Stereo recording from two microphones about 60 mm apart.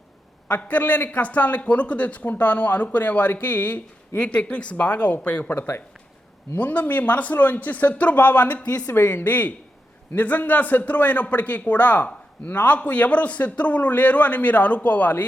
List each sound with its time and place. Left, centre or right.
0.4 s a man's voice: left
8.9 s a man's voice: left